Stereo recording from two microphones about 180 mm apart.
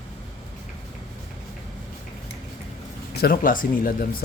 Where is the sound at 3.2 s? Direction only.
55° left (ahead or behind).